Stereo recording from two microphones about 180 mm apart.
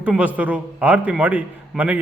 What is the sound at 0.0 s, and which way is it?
A man's voice, 5° right (ahead or behind).